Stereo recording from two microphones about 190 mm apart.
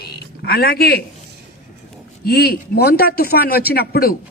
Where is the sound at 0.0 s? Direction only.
55° left (ahead or behind).